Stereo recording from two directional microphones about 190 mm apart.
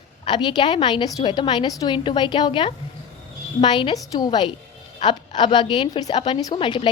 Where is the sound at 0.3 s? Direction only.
25° left (ahead or behind).